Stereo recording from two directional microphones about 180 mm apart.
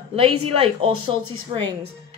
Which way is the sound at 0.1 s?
30° right (ahead or behind).